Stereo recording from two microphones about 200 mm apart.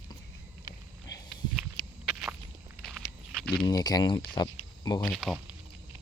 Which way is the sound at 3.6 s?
20° left (ahead or behind).